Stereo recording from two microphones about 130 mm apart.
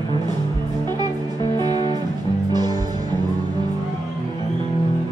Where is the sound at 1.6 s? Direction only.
30° right (ahead or behind).